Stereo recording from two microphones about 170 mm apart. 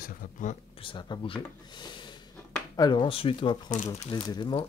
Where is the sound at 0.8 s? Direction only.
25° left (ahead or behind).